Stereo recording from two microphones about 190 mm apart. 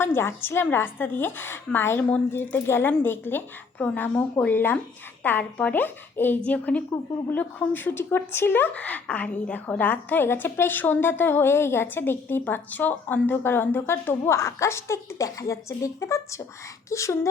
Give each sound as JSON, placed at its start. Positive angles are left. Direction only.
{"t": 0.0, "sound": "speech", "side_deg": 10}